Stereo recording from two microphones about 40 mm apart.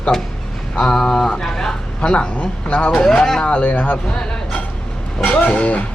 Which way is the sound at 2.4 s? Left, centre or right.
Left.